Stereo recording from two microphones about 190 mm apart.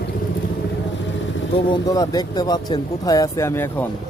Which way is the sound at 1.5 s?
20° left (ahead or behind).